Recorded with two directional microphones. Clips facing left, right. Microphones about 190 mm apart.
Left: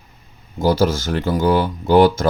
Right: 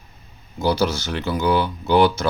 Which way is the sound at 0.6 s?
45° left (ahead or behind).